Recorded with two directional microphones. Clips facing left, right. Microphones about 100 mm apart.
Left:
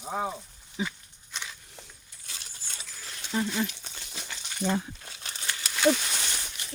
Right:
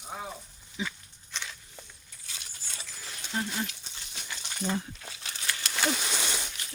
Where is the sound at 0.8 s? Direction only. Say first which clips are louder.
Left 3 dB; 35° left (ahead or behind).